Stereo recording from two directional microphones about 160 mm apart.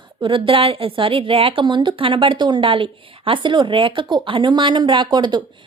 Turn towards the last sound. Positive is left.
turn(degrees=-25)  # may be behind; listen again after turning